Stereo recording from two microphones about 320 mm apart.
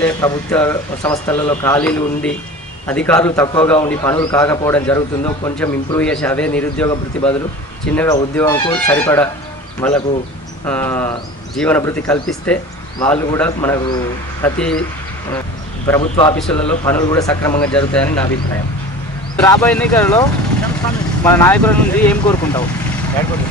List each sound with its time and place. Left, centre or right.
0.0 s a man's voice: centre
16.0 s speech: centre
16.3 s a man's voice: centre
19.3 s a man's voice: centre